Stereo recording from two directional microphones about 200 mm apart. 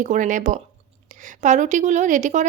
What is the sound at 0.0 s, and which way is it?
A woman's voice, 40° right (ahead or behind).